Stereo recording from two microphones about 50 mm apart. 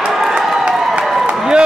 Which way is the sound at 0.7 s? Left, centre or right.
Centre.